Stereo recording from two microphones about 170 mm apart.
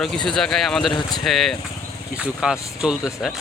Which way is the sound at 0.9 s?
25° left (ahead or behind).